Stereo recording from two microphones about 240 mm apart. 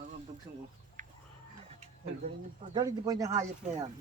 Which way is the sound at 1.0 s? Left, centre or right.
Right.